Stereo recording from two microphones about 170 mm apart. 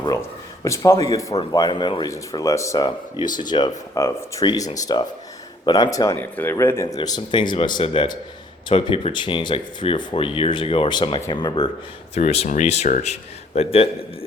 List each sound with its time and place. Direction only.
0.0 s speech: 20° left (ahead or behind)
12.1 s speech: 35° left (ahead or behind)